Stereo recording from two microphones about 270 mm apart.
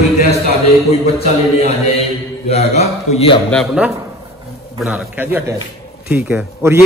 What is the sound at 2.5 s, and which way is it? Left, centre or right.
Speech, left.